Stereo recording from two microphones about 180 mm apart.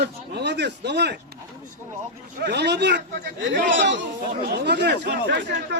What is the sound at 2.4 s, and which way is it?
Speech, 70° right (ahead or behind).